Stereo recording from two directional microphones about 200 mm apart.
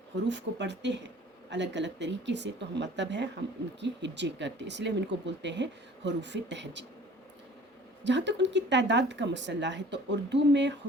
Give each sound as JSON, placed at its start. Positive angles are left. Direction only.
{"t": 0.3, "sound": "speech", "side_deg": -60}
{"t": 8.0, "sound": "speech", "side_deg": -60}